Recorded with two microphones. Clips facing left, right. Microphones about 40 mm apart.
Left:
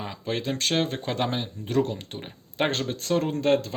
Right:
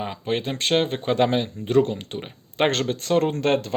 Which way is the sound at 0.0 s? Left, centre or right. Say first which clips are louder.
Right 4 dB; right.